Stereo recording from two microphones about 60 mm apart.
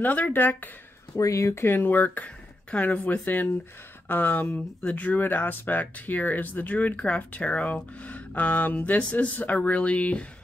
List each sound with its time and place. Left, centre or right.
0.0 s speech: left
1.1 s speech: left